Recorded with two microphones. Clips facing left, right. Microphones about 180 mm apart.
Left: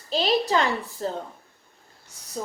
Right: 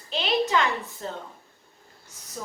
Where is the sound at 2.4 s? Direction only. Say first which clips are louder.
Left 5 dB; 30° left (ahead or behind).